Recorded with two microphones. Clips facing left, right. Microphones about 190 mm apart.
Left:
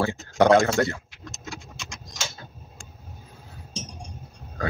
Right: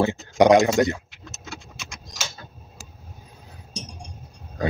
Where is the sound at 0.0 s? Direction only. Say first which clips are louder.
Right 3 dB; 15° right (ahead or behind).